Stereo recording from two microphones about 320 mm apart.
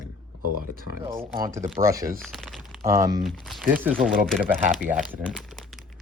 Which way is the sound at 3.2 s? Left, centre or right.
Centre.